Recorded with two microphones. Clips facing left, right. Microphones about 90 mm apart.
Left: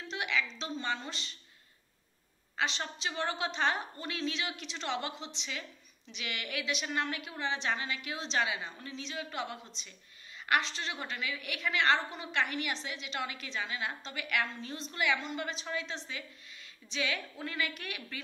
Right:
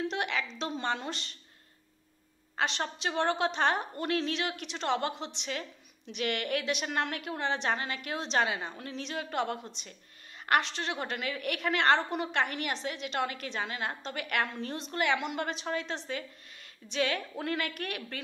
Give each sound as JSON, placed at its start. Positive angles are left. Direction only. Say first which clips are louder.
{"t": 0.1, "sound": "a sound", "louder": "right 2 dB", "side_deg": -50}
{"t": 2.5, "sound": "a woman's voice", "louder": "right 3 dB", "side_deg": -45}
{"t": 15.1, "sound": "a woman's voice", "louder": "right 4 dB", "side_deg": -60}